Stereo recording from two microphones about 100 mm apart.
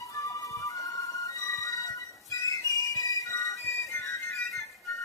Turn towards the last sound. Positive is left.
turn(degrees=35)  # may be behind; listen again after turning